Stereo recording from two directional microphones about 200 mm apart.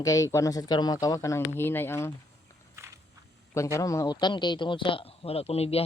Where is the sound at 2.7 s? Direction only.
15° right (ahead or behind).